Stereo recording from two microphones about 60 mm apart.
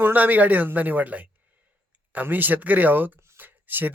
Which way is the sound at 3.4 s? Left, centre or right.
Right.